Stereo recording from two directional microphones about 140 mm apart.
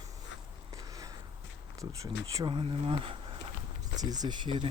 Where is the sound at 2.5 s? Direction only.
40° right (ahead or behind).